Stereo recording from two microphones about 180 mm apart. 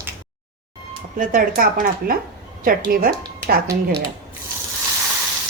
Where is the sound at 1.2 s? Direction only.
50° right (ahead or behind).